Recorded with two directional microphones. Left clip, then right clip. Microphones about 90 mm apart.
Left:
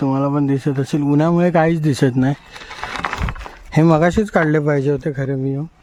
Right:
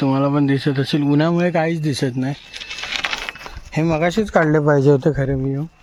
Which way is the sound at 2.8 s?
80° left.